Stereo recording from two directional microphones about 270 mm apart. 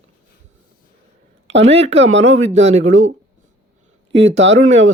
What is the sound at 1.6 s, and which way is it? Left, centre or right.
Speech, right.